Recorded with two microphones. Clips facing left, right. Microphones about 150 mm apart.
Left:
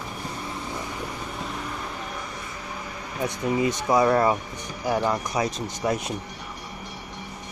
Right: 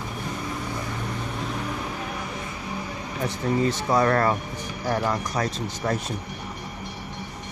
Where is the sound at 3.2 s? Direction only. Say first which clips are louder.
Even; 15° left (ahead or behind).